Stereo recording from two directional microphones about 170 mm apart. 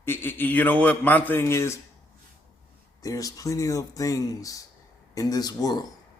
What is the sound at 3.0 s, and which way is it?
A man's voice, 20° left (ahead or behind).